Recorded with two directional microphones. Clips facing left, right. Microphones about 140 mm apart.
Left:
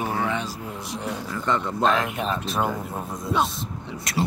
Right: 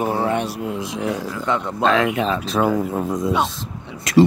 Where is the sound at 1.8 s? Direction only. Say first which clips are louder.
Right 8 dB; 90° right.